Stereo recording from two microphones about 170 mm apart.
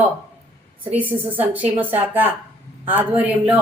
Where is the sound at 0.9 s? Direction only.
10° right (ahead or behind).